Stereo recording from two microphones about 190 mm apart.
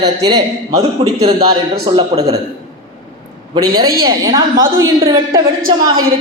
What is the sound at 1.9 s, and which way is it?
Speech, 30° right (ahead or behind).